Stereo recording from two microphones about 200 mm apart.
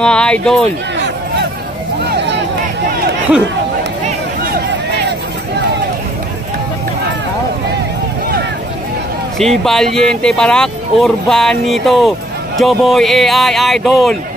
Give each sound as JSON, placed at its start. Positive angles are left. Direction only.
{"t": 0.0, "sound": "speech", "side_deg": 5}
{"t": 2.0, "sound": "a sound", "side_deg": -60}
{"t": 9.4, "sound": "speech", "side_deg": 0}